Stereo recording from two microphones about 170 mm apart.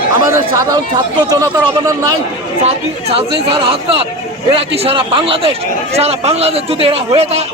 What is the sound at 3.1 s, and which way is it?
A man's voice, 35° right (ahead or behind).